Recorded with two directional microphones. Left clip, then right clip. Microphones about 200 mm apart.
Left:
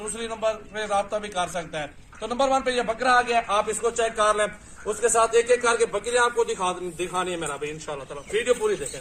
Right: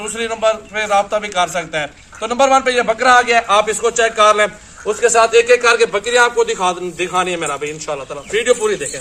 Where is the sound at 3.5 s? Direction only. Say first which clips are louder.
Right 10 dB; 10° right (ahead or behind).